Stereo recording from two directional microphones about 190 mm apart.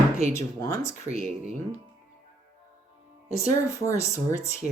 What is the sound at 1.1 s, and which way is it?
Speech, 35° right (ahead or behind).